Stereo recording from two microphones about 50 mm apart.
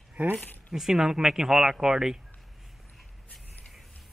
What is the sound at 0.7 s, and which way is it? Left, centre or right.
Speech, centre.